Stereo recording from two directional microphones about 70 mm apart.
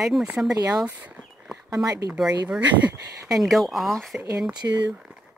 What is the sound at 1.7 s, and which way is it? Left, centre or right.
Speech, right.